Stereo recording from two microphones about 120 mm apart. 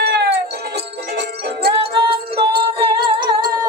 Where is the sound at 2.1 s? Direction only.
45° right (ahead or behind).